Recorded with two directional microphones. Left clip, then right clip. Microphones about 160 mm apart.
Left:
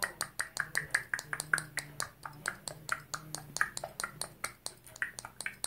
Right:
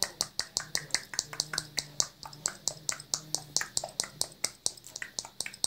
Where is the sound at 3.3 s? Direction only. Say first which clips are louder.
Left 3 dB; 35° right (ahead or behind).